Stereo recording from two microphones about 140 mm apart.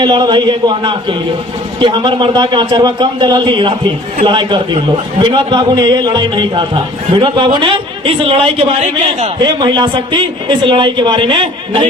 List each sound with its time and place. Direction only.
0.0 s a man's voice: 30° right (ahead or behind)